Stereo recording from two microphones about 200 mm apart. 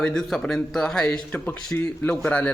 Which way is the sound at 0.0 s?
5° left (ahead or behind).